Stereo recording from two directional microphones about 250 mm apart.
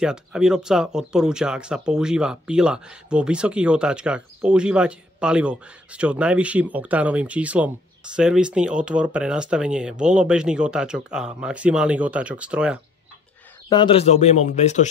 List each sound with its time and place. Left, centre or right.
0.0 s speech: centre
13.7 s speech: centre